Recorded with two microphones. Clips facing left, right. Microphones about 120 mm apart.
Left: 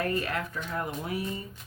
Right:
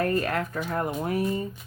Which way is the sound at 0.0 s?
45° right (ahead or behind).